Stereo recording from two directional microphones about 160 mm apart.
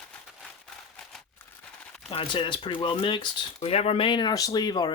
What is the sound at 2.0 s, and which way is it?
Speech, 30° left (ahead or behind).